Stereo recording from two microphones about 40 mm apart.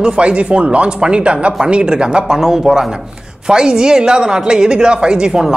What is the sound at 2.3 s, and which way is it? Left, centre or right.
A woman's voice, centre.